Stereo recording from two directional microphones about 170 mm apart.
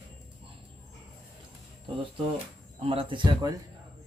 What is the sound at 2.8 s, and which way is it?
Speech, 35° right (ahead or behind).